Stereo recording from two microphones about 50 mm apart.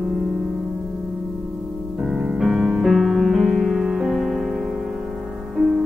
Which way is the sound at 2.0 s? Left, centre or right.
Centre.